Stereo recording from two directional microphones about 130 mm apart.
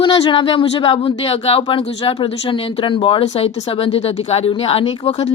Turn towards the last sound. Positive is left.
turn(degrees=55)  # may be behind; listen again after turning